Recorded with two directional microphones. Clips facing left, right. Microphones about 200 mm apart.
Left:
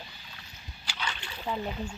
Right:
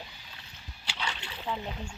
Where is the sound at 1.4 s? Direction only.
10° left (ahead or behind).